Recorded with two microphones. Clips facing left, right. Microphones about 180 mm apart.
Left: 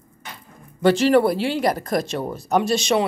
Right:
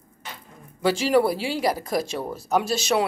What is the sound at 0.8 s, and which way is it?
Speech, 10° right (ahead or behind).